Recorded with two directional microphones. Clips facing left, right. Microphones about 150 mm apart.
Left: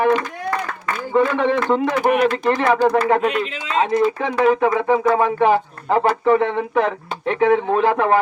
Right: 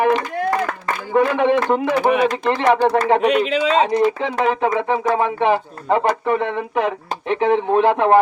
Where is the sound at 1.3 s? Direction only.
15° right (ahead or behind).